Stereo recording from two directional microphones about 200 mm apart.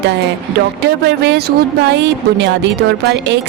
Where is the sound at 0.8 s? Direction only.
55° right (ahead or behind).